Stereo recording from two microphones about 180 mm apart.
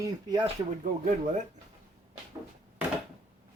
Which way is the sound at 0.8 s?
45° right (ahead or behind).